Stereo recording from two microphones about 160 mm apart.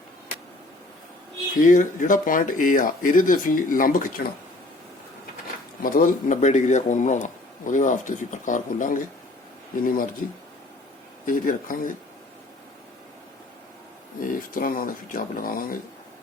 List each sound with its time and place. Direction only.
1.5 s speech: 55° left (ahead or behind)
5.8 s speech: 60° left (ahead or behind)
11.3 s speech: 60° left (ahead or behind)
14.2 s speech: 60° left (ahead or behind)